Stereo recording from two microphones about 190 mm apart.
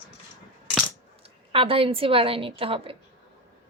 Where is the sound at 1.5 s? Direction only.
30° right (ahead or behind).